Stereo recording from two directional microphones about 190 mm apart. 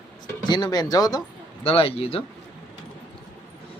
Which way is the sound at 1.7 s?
30° left (ahead or behind).